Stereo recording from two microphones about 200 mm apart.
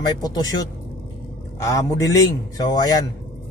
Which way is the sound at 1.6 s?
15° left (ahead or behind).